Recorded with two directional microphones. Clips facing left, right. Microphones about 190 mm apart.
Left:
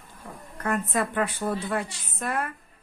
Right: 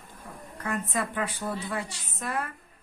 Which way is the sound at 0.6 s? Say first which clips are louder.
Left 4 dB; 55° left (ahead or behind).